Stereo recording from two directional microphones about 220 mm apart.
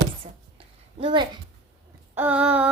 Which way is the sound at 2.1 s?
5° right (ahead or behind).